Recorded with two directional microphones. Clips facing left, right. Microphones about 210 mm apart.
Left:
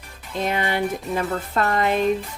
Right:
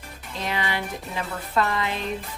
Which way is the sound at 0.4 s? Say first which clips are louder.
Left 5 dB; 50° left (ahead or behind).